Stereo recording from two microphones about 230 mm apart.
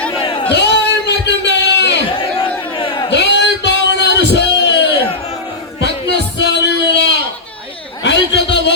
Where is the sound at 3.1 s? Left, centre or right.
Left.